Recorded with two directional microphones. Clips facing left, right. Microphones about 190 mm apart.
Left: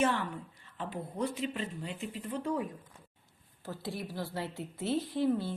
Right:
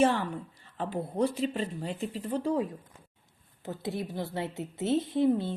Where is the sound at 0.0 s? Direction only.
35° right (ahead or behind).